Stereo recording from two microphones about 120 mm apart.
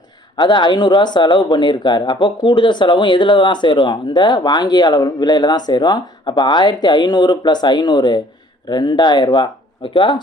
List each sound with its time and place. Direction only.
0.3 s speech: 40° left (ahead or behind)